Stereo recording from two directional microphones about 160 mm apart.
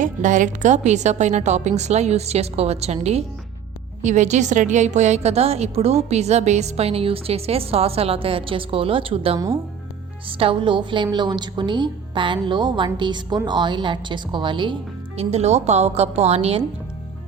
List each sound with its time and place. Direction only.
0.0 s a woman's voice: 55° right (ahead or behind)